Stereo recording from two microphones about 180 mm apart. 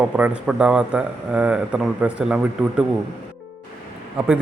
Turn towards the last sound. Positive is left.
turn(degrees=-10)  # may be behind; listen again after turning